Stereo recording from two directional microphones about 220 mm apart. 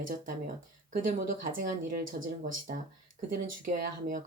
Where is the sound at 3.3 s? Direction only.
40° right (ahead or behind).